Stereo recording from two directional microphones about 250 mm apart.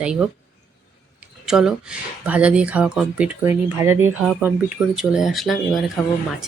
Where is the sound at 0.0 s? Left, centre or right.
Centre.